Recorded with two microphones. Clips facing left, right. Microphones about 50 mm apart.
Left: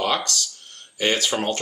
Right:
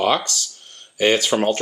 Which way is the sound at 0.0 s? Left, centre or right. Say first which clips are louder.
Right 4 dB; centre.